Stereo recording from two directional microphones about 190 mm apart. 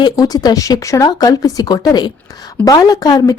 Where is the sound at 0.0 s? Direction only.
20° left (ahead or behind).